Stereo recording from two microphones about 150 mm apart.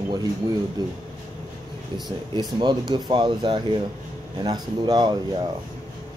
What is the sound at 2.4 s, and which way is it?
Speech, 30° right (ahead or behind).